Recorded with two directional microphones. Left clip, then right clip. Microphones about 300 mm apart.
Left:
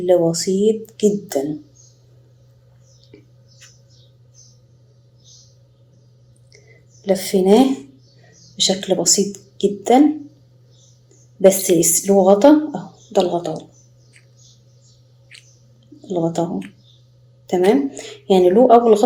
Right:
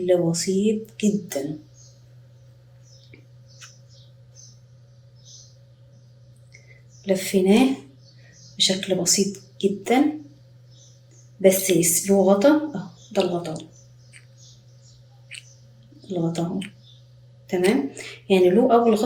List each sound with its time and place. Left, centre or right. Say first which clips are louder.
0.0 s speech: left 5 dB; centre
7.0 s speech: left 4 dB; centre
11.4 s speech: left 5 dB; centre
16.0 s speech: left 6 dB; centre
17.4 s speech: left 6 dB; centre